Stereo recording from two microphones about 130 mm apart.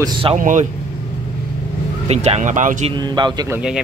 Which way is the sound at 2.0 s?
55° right (ahead or behind).